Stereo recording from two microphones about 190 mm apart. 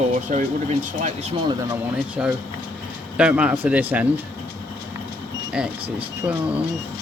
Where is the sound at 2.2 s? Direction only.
5° right (ahead or behind).